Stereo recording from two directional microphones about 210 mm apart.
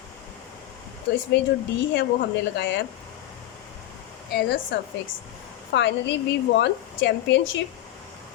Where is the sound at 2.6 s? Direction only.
60° left (ahead or behind).